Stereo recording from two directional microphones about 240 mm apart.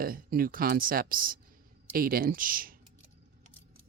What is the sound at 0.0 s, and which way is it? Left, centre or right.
Speech, right.